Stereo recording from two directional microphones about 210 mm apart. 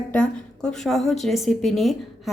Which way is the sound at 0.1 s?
5° left (ahead or behind).